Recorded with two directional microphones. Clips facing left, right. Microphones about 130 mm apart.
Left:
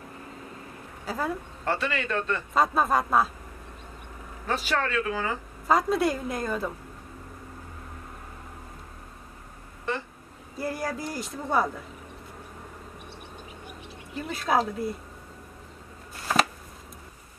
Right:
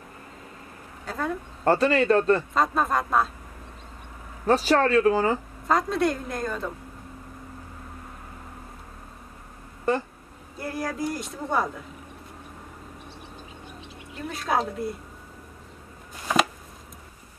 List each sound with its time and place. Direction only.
1.0 s speech: 5° left (ahead or behind)
1.6 s speech: 40° right (ahead or behind)
2.5 s speech: centre (ahead or behind)
4.5 s speech: 35° right (ahead or behind)
5.7 s speech: 5° left (ahead or behind)
9.9 s speech: 40° right (ahead or behind)
10.6 s speech: centre (ahead or behind)
14.3 s speech: centre (ahead or behind)